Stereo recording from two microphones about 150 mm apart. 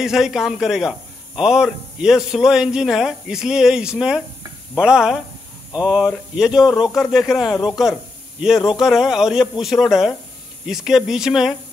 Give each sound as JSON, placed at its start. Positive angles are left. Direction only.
{"t": 0.0, "sound": "a man's voice", "side_deg": -5}
{"t": 6.7, "sound": "speech", "side_deg": 25}
{"t": 7.0, "sound": "a man's voice", "side_deg": 0}